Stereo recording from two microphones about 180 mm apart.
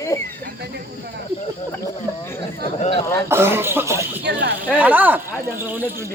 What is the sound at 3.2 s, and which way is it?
Speech, 15° right (ahead or behind).